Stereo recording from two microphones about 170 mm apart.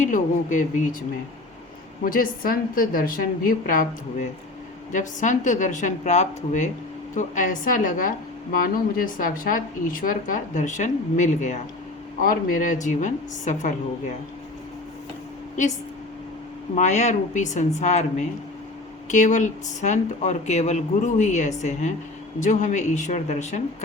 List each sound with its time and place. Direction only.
0.0 s speech: 50° left (ahead or behind)
2.0 s a woman's voice: 55° left (ahead or behind)
4.9 s speech: 45° left (ahead or behind)
12.2 s speech: 55° left (ahead or behind)
16.7 s speech: 45° left (ahead or behind)
19.0 s speech: 45° left (ahead or behind)